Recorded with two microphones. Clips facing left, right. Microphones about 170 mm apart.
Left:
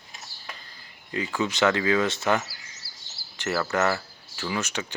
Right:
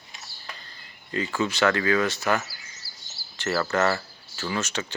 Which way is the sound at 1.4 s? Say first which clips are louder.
Even; 20° left (ahead or behind).